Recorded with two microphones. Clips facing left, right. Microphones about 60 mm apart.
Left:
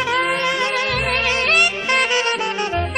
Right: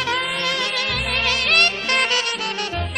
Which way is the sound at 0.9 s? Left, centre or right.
Centre.